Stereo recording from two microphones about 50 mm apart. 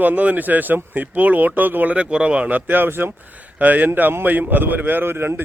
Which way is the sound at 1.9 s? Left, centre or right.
Right.